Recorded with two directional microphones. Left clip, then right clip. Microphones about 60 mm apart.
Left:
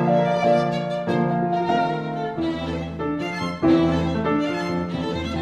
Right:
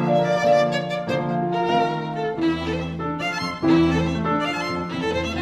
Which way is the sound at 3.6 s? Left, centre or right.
Right.